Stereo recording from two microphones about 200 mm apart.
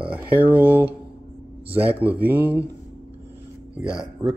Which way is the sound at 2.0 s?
10° right (ahead or behind).